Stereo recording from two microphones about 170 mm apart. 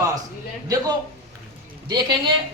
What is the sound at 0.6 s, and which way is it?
A woman's voice, 20° right (ahead or behind).